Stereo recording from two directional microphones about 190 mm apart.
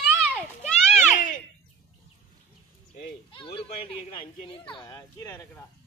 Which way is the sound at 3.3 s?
30° left (ahead or behind).